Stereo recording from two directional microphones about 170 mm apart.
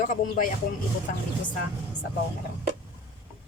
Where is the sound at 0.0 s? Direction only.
50° left (ahead or behind).